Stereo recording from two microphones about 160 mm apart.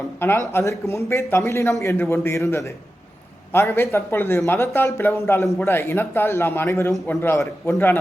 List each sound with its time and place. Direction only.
0.2 s speech: 15° left (ahead or behind)